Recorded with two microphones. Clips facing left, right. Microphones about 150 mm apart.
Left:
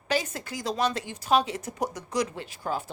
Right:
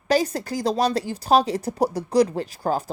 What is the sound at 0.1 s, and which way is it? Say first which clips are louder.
A woman's voice: right 8 dB; 35° right (ahead or behind).